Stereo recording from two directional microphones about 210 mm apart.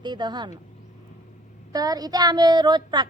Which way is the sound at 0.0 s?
20° right (ahead or behind).